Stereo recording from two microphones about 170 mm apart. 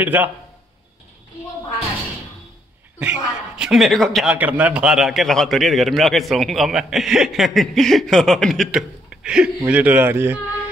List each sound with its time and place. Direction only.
0.0 s a man's voice: 10° right (ahead or behind)
3.0 s a man's voice: 5° right (ahead or behind)